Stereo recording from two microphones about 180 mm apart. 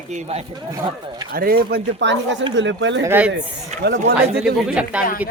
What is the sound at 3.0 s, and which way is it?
Speech, 10° right (ahead or behind).